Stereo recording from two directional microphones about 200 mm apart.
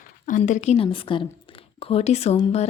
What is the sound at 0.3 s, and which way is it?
A woman's voice, 40° left (ahead or behind).